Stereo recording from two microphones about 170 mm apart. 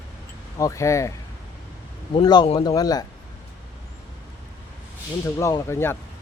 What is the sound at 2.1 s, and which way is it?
Speech, 25° left (ahead or behind).